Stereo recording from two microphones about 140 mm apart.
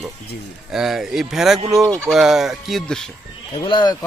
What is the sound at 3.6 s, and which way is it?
Speech, 30° left (ahead or behind).